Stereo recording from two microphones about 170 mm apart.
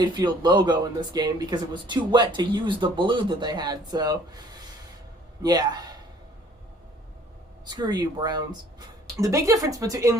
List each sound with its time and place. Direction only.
0.0 s speech: 25° right (ahead or behind)
5.4 s speech: 25° right (ahead or behind)
7.6 s speech: 25° right (ahead or behind)